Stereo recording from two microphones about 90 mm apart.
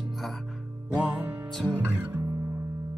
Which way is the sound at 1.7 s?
20° right (ahead or behind).